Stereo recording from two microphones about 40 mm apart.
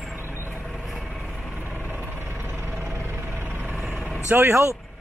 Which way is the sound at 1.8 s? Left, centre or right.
Right.